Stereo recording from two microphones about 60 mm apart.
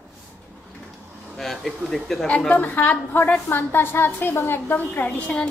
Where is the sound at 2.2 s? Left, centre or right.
Left.